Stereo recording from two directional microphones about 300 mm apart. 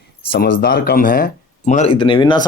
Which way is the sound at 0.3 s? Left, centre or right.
Left.